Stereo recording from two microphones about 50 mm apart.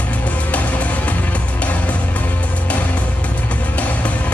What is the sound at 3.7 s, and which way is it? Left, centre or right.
Music, left.